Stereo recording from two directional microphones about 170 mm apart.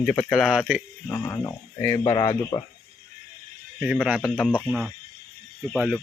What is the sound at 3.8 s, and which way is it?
Speech, 5° right (ahead or behind).